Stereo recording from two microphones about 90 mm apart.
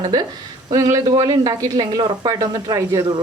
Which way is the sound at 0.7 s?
40° right (ahead or behind).